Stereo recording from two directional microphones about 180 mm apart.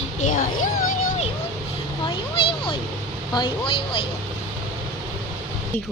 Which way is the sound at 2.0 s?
30° left (ahead or behind).